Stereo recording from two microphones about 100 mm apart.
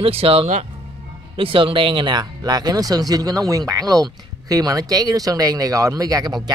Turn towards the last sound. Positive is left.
turn(degrees=-40)  # may be behind; listen again after turning